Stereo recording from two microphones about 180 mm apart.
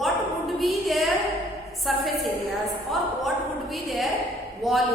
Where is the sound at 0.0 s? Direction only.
Centre (ahead or behind).